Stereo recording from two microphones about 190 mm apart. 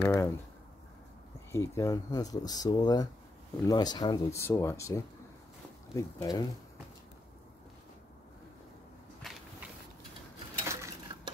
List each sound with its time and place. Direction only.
0.0 s a sound: 15° left (ahead or behind)
1.5 s speech: 15° left (ahead or behind)
9.2 s walk: centre (ahead or behind)
10.6 s dishes: 15° right (ahead or behind)